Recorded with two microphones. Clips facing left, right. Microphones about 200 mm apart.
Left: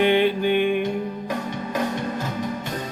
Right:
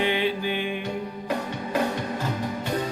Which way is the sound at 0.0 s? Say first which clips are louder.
Left 6 dB; 55° left (ahead or behind).